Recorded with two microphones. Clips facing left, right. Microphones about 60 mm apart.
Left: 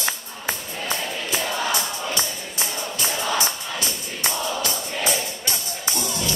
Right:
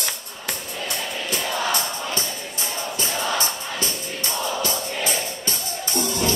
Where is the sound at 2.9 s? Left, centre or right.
Right.